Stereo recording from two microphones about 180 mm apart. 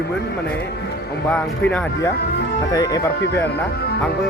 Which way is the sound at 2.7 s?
20° left (ahead or behind).